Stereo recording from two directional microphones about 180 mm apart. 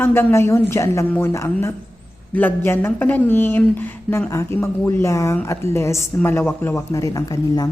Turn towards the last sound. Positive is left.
turn(degrees=20)  # may be behind; listen again after turning